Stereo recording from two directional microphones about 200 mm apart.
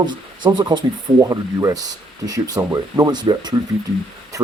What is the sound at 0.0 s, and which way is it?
Speech, 20° right (ahead or behind).